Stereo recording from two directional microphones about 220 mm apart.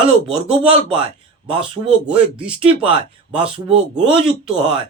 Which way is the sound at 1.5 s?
25° right (ahead or behind).